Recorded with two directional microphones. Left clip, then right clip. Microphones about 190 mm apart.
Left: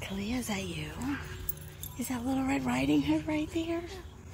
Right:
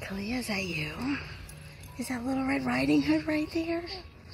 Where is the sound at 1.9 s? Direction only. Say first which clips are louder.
Right 1 dB; 20° right (ahead or behind).